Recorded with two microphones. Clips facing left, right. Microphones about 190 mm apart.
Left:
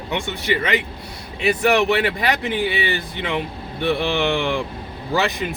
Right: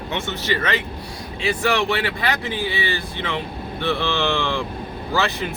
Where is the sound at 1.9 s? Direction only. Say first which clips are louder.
Left 3 dB; 20° left (ahead or behind).